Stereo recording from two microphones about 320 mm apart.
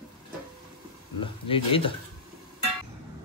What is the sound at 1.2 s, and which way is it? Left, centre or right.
Speech, centre.